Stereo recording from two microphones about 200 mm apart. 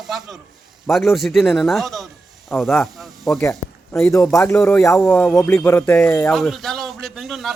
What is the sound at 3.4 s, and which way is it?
A man's voice, 15° left (ahead or behind).